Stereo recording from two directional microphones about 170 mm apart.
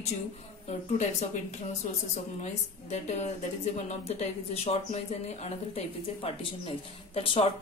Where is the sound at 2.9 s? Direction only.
40° left (ahead or behind).